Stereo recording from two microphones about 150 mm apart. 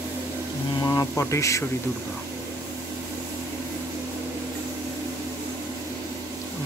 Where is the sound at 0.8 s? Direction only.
25° left (ahead or behind).